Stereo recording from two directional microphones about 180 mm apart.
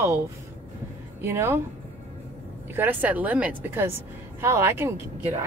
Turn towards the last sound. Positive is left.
turn(degrees=-15)  # may be behind; listen again after turning